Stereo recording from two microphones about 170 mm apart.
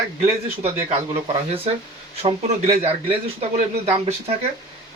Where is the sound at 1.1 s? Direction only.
35° right (ahead or behind).